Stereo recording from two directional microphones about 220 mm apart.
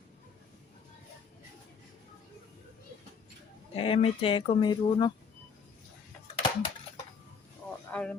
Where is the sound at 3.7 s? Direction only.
25° left (ahead or behind).